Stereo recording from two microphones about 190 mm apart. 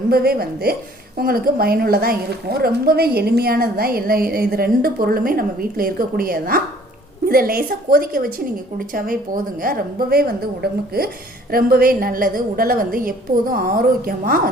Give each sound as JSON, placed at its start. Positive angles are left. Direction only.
{"t": 0.1, "sound": "a woman's voice", "side_deg": -50}